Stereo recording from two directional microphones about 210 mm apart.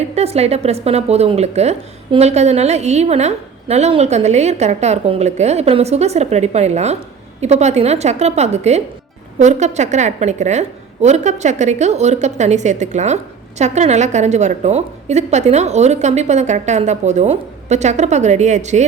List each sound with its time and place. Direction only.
0.2 s a woman's voice: 30° right (ahead or behind)